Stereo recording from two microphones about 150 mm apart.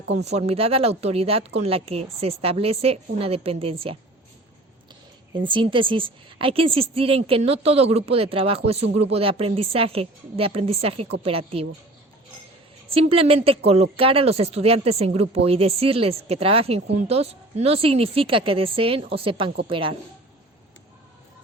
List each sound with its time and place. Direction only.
0.3 s a woman's voice: 45° right (ahead or behind)
5.4 s a woman's voice: 35° right (ahead or behind)
12.9 s a woman's voice: 40° right (ahead or behind)